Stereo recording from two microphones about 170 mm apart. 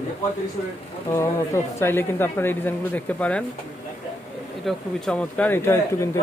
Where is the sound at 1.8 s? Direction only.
15° left (ahead or behind).